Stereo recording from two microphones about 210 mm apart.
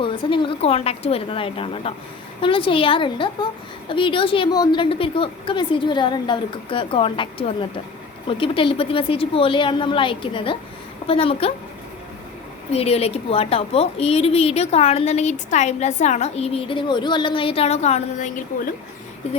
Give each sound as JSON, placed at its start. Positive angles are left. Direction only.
{"t": 0.0, "sound": "a woman's voice", "side_deg": 25}
{"t": 12.7, "sound": "a woman's voice", "side_deg": 30}